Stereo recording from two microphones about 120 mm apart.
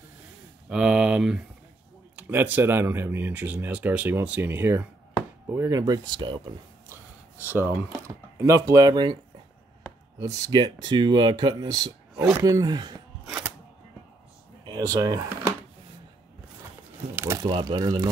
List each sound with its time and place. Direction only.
0.7 s speech: 5° right (ahead or behind); by 6.5 s 40° right (ahead or behind)
6.9 s a sound: 15° right (ahead or behind)
8.4 s speech: 25° right (ahead or behind)
10.1 s speech: 30° right (ahead or behind)
14.6 s speech: 35° right (ahead or behind)
17.1 s a sound: 20° right (ahead or behind)
17.6 s speech: 35° right (ahead or behind)